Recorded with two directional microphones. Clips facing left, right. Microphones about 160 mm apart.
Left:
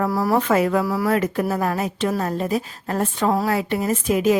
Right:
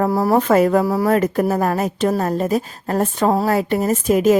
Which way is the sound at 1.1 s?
40° right (ahead or behind).